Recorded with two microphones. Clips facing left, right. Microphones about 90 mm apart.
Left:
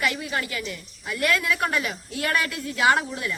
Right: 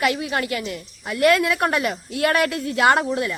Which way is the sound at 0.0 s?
55° right (ahead or behind).